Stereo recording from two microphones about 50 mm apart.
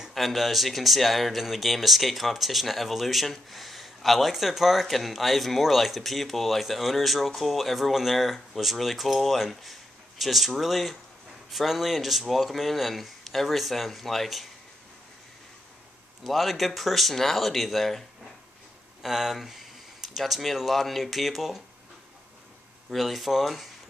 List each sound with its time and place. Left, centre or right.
0.1 s speech: centre
16.3 s speech: centre
19.0 s speech: centre
22.8 s speech: centre